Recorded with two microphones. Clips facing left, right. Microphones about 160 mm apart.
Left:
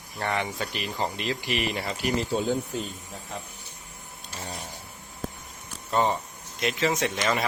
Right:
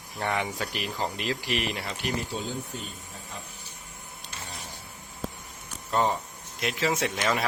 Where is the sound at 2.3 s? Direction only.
45° left (ahead or behind).